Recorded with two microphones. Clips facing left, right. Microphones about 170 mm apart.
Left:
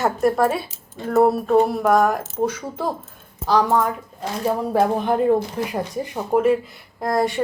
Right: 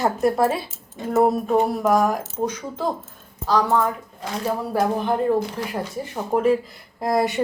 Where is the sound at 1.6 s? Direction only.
Centre (ahead or behind); by 5.3 s 20° left (ahead or behind).